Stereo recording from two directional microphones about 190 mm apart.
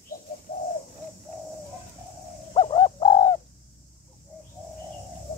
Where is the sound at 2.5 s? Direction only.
25° left (ahead or behind).